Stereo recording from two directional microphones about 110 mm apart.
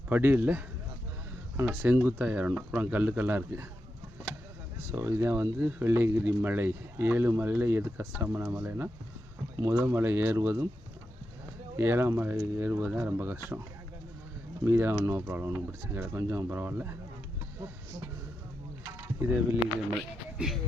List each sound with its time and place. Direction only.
0.1 s speech: 15° right (ahead or behind)
1.6 s speech: 15° right (ahead or behind)
4.9 s speech: 20° right (ahead or behind)
11.8 s speech: 20° right (ahead or behind)
14.6 s speech: 20° right (ahead or behind)
18.8 s a sound: 25° right (ahead or behind)